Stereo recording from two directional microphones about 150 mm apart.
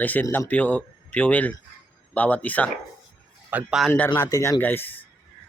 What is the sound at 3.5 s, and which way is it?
Speech, 5° right (ahead or behind).